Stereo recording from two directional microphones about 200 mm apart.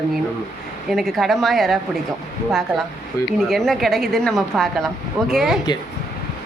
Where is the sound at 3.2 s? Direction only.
15° left (ahead or behind).